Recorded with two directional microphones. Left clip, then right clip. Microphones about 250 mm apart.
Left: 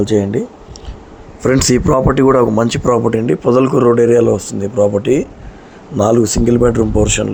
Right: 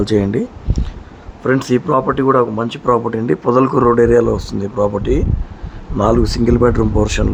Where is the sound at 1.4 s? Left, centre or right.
Centre.